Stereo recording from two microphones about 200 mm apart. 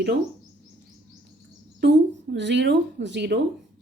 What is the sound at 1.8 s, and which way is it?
A woman's voice, 60° right (ahead or behind).